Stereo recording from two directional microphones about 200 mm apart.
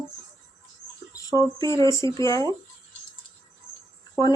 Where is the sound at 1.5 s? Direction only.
15° left (ahead or behind).